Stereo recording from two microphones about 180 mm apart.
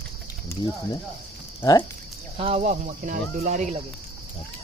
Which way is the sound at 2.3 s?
35° right (ahead or behind).